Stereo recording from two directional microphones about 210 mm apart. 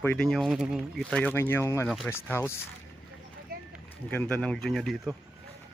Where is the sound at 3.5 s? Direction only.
45° right (ahead or behind).